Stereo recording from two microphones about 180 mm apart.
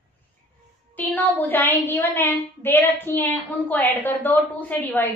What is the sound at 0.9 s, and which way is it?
A woman's voice, 10° left (ahead or behind).